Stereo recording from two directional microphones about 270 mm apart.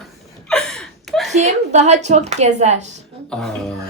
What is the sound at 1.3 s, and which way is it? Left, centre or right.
A woman's voice, right.